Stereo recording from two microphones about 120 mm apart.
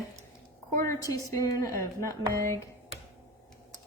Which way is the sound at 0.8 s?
25° left (ahead or behind).